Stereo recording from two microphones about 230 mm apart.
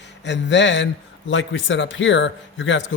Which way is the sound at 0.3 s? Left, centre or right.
Left.